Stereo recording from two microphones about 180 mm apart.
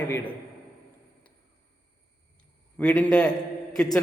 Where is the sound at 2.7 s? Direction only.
10° left (ahead or behind).